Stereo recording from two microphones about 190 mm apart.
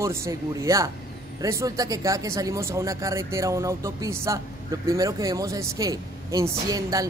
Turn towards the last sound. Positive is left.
turn(degrees=-20)  # may be behind; listen again after turning